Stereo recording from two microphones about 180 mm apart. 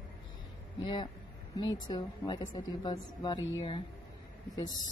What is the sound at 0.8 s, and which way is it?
A woman's voice, 25° left (ahead or behind).